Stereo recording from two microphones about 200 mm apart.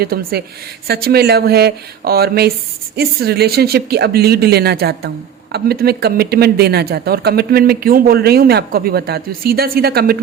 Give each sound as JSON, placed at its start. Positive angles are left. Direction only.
{"t": 0.0, "sound": "speech", "side_deg": -50}